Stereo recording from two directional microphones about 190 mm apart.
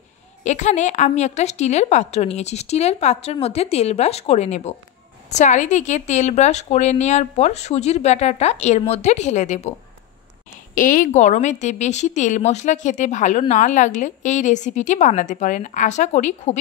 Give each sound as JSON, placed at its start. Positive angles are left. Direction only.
{"t": 0.4, "sound": "a woman's voice", "side_deg": 40}
{"t": 10.7, "sound": "a woman's voice", "side_deg": 45}